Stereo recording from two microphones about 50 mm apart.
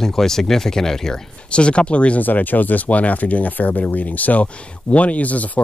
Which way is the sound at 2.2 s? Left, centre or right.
Left.